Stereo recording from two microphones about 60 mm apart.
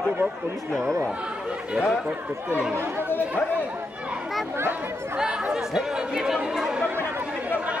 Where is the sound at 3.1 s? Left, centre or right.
Left.